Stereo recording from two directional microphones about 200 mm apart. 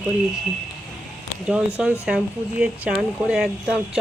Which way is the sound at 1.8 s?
5° right (ahead or behind).